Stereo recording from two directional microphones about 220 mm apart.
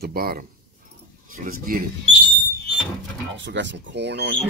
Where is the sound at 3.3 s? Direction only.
55° right (ahead or behind).